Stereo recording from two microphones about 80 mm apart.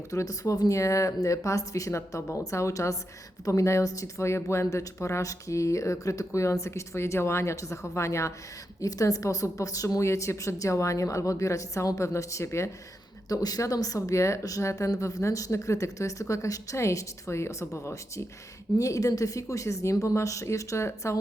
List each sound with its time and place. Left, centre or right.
0.1 s speech: left
13.2 s speech: left
18.8 s speech: left